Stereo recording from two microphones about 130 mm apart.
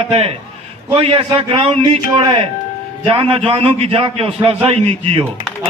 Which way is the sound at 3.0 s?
45° right (ahead or behind).